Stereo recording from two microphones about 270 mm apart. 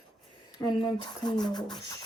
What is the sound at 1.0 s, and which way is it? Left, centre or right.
Speech, centre.